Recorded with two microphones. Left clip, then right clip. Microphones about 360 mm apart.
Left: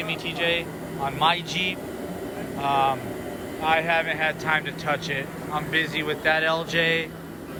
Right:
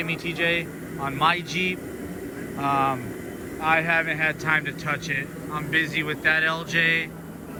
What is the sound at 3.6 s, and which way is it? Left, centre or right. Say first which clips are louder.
Speech: right 1 dB; centre.